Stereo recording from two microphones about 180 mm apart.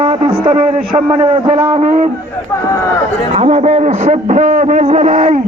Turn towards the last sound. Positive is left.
turn(degrees=-40)  # may be behind; listen again after turning